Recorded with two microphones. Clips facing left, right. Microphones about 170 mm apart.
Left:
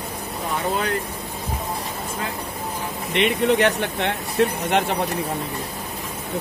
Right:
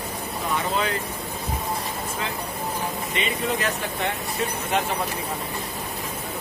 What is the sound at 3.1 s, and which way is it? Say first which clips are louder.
Speech: left 9 dB; 75° left (ahead or behind).